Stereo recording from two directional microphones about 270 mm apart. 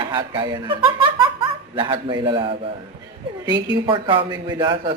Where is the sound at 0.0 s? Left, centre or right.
Centre.